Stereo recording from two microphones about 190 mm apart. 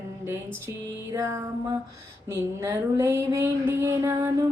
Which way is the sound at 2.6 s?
15° right (ahead or behind).